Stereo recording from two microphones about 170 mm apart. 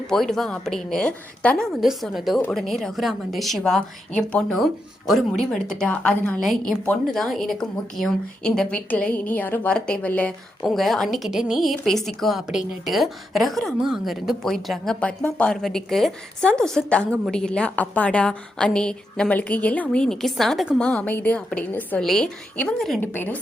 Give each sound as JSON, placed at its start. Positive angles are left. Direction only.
{"t": 0.1, "sound": "a woman's voice", "side_deg": 0}